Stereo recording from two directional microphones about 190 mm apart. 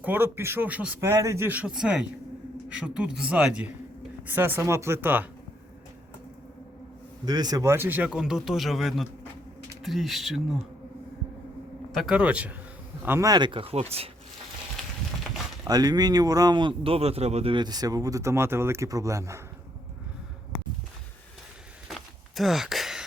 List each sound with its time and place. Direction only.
0.0 s speech: 10° right (ahead or behind)
7.3 s speech: 20° right (ahead or behind); by 10.6 s centre (ahead or behind)
11.9 s a man's voice: centre (ahead or behind); by 14.1 s 35° right (ahead or behind)
15.6 s a man's voice: 20° right (ahead or behind)
22.4 s speech: centre (ahead or behind)